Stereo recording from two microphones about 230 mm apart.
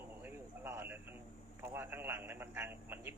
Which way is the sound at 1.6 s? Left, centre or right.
Centre.